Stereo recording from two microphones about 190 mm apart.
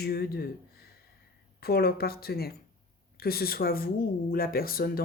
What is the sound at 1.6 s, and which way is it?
Speech, 55° left (ahead or behind).